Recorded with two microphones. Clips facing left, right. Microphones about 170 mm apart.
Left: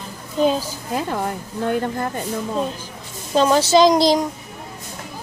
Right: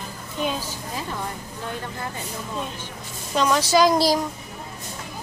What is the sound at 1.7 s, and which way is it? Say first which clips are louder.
Speech: left 10 dB; 50° left (ahead or behind).